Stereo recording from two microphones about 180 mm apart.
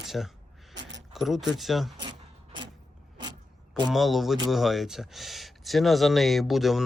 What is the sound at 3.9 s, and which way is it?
Speech, centre (ahead or behind).